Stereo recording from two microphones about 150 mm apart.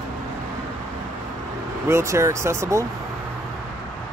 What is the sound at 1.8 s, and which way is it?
Speech, 20° right (ahead or behind).